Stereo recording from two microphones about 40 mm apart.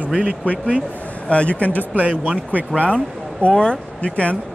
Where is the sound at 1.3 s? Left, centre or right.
Left.